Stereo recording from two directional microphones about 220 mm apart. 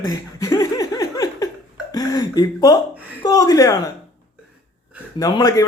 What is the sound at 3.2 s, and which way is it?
Speech, 15° left (ahead or behind).